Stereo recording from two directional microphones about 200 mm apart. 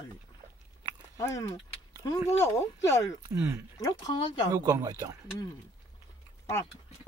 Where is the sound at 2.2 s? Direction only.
35° left (ahead or behind).